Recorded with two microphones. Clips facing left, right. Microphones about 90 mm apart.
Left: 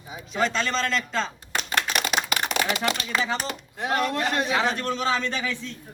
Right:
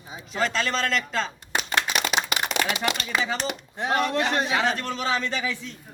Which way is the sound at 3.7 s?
30° right (ahead or behind).